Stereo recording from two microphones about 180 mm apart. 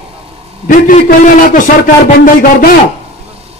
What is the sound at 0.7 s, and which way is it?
A man's voice, 45° left (ahead or behind).